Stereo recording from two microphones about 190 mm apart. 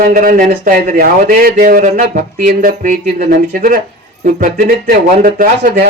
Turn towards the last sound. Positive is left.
turn(degrees=-45)  # may be behind; listen again after turning